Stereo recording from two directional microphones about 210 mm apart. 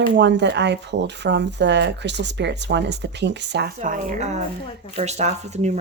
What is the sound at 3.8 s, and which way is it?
Speech, 35° right (ahead or behind).